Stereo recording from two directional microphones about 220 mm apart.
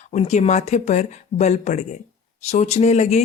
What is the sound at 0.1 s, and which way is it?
A woman's voice, 30° left (ahead or behind).